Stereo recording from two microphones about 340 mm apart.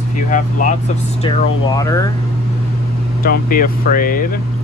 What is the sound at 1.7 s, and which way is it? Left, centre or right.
Speech, centre.